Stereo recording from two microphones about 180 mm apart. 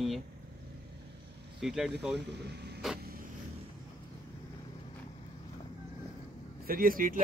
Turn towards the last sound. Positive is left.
turn(degrees=-50)  # may be behind; listen again after turning